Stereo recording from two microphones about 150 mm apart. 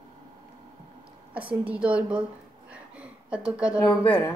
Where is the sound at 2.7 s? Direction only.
10° right (ahead or behind).